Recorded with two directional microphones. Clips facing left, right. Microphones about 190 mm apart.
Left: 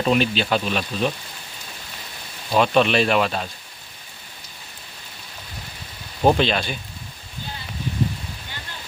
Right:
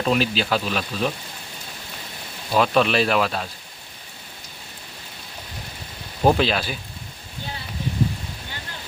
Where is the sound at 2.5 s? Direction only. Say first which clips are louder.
Left 1 dB; centre (ahead or behind).